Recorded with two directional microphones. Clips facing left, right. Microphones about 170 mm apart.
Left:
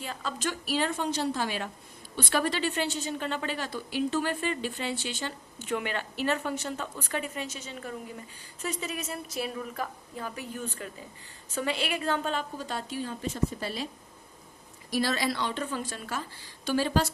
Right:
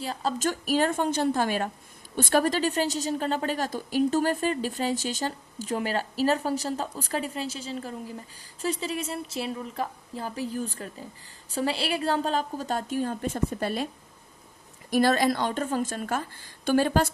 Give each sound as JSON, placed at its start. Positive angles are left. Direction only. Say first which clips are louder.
{"t": 0.0, "sound": "a woman's voice", "louder": "right 6 dB", "side_deg": -35}
{"t": 14.8, "sound": "a woman's voice", "louder": "right 6 dB", "side_deg": -50}